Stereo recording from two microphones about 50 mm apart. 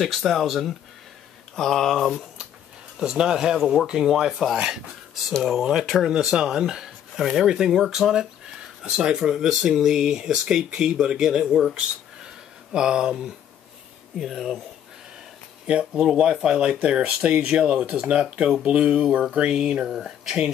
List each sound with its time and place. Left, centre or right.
0.0 s speech: centre
1.5 s a sound: centre
3.0 s speech: centre
12.7 s speech: centre
14.1 s speech: centre
15.6 s speech: right